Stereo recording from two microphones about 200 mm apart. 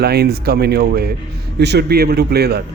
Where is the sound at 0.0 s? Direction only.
55° right (ahead or behind).